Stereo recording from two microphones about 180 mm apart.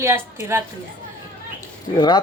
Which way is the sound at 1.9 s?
25° left (ahead or behind).